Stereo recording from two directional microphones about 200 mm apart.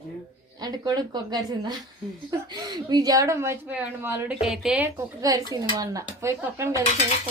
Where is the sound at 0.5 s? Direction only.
20° right (ahead or behind); by 4.9 s 5° right (ahead or behind).